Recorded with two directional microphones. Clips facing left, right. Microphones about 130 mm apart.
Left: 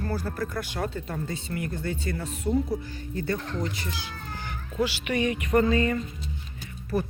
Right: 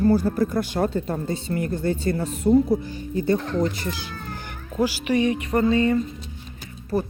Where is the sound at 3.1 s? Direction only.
15° right (ahead or behind).